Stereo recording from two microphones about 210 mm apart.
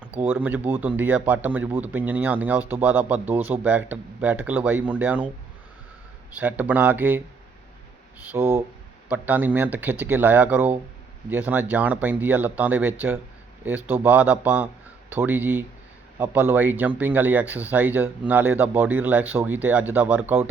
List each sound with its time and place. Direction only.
0.2 s speech: 10° right (ahead or behind)
6.3 s speech: 10° right (ahead or behind)
8.2 s speech: 10° right (ahead or behind)